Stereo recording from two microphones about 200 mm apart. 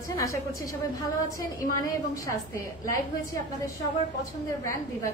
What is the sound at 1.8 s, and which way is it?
A woman's voice, 15° left (ahead or behind).